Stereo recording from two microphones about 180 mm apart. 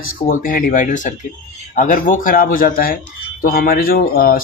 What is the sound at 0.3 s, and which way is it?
Speech, 50° left (ahead or behind).